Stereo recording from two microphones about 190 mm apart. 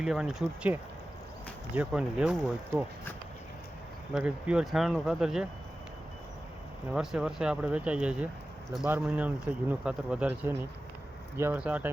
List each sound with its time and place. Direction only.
0.0 s speech: 5° right (ahead or behind)
4.1 s speech: 5° right (ahead or behind)
6.9 s speech: 5° right (ahead or behind)